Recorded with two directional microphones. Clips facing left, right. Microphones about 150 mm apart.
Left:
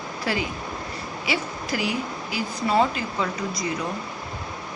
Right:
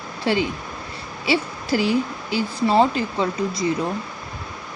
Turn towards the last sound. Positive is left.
turn(degrees=-30)  # may be behind; listen again after turning